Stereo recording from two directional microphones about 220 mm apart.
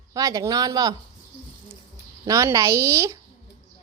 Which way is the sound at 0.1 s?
15° right (ahead or behind).